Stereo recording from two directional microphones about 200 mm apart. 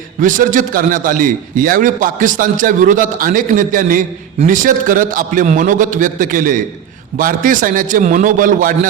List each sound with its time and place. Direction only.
0.2 s a man's voice: 40° right (ahead or behind)